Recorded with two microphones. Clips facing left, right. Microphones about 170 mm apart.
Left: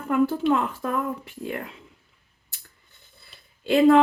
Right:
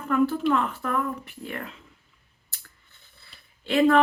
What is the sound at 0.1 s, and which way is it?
Speech, 25° left (ahead or behind).